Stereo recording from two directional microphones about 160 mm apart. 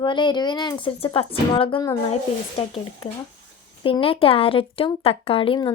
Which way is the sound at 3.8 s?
35° left (ahead or behind).